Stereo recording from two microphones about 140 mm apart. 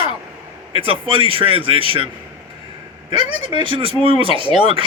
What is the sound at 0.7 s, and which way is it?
A man's voice, 40° right (ahead or behind).